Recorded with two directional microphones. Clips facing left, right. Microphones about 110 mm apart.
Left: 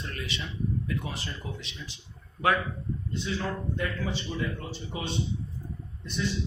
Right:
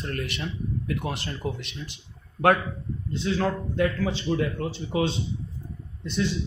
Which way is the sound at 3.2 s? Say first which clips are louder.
Right 8 dB; 90° right.